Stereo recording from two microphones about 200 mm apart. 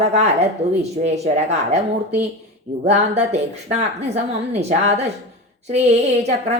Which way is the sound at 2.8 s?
35° right (ahead or behind).